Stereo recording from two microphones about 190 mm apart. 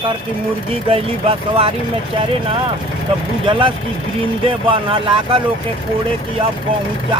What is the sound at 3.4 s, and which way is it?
Speech, 25° right (ahead or behind).